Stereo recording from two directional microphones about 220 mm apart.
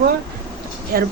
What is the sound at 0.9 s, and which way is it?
Speech, 45° right (ahead or behind).